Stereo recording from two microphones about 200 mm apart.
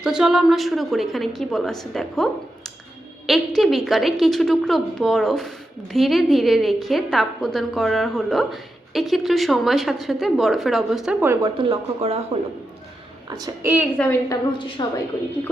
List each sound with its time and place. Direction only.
0.0 s a woman's voice: 5° right (ahead or behind)
11.5 s speech: 30° right (ahead or behind)
13.3 s a woman's voice: 15° right (ahead or behind)
14.0 s a woman's voice: 10° left (ahead or behind)